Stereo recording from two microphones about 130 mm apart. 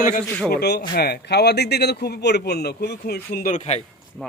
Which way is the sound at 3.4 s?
65° left (ahead or behind).